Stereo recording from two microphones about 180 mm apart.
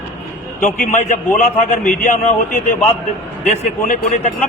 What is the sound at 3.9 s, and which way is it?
Speech, 40° left (ahead or behind).